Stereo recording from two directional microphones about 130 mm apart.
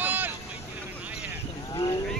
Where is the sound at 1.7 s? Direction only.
30° left (ahead or behind).